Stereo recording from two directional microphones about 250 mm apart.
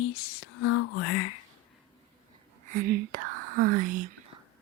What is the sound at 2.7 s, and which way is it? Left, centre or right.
Whispering, right.